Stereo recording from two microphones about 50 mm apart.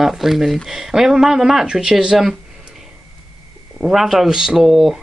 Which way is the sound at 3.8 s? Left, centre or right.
Centre.